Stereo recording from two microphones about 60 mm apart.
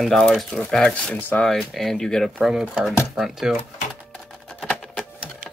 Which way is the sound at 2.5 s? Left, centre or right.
Centre.